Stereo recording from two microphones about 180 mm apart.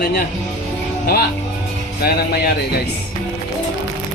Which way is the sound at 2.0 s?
60° left (ahead or behind).